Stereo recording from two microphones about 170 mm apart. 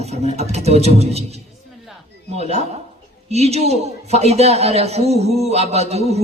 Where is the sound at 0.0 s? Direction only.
40° right (ahead or behind).